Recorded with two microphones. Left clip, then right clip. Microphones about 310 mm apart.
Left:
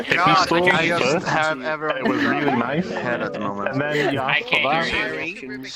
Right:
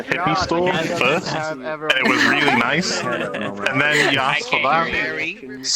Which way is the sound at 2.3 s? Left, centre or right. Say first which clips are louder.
Right 5 dB; right.